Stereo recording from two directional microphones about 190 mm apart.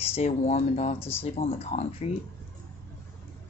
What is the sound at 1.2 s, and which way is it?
Speech, 30° left (ahead or behind).